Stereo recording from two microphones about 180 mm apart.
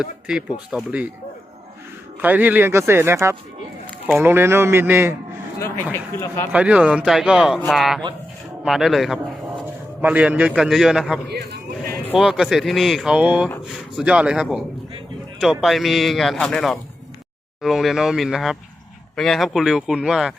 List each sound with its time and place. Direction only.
0.0 s a man's voice: 5° right (ahead or behind)
2.2 s a man's voice: 10° right (ahead or behind)
5.5 s music: 15° left (ahead or behind)
5.9 s speech: 15° left (ahead or behind)
6.5 s a man's voice: 5° right (ahead or behind)